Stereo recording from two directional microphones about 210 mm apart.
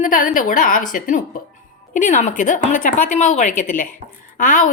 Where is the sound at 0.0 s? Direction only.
40° left (ahead or behind).